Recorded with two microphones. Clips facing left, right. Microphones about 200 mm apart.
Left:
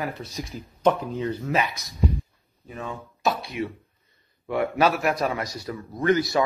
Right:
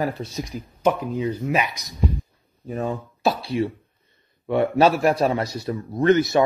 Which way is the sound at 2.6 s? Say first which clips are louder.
Right 8 dB; 40° right (ahead or behind).